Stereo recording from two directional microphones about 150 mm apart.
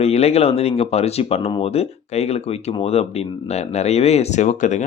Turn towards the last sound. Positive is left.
turn(degrees=55)  # may be behind; listen again after turning